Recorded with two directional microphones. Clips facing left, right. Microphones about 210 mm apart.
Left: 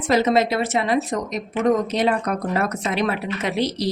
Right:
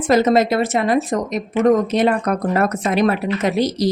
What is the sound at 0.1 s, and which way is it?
Speech, 45° right (ahead or behind).